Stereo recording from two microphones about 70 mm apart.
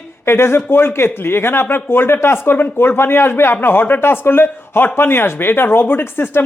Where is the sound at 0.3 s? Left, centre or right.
Left.